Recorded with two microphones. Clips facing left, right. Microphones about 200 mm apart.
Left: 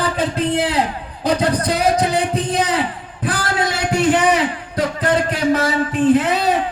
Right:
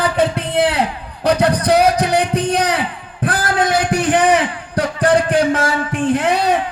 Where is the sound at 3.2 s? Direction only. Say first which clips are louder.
Right 3 dB; 50° right (ahead or behind).